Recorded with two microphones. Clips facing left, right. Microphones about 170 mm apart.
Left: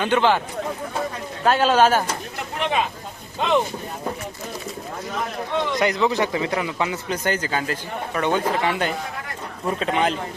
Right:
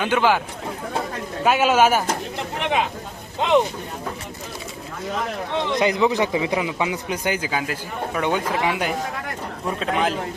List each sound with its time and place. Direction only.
0.0 s a man's voice: 5° right (ahead or behind)
1.5 s a man's voice: 10° right (ahead or behind)
5.8 s a man's voice: 15° right (ahead or behind); by 10.2 s centre (ahead or behind)